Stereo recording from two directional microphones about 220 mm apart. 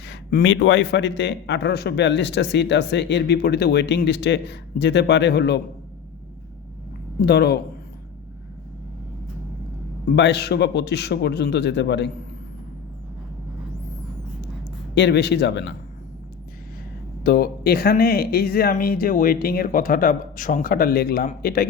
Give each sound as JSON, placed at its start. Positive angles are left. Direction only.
{"t": 0.0, "sound": "a man's voice", "side_deg": 45}
{"t": 7.2, "sound": "a man's voice", "side_deg": 45}
{"t": 10.2, "sound": "a man's voice", "side_deg": 50}
{"t": 14.9, "sound": "a man's voice", "side_deg": 50}
{"t": 17.2, "sound": "a man's voice", "side_deg": 45}